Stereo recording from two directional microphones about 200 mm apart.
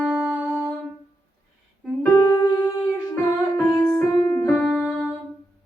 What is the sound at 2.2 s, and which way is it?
Music, 15° left (ahead or behind).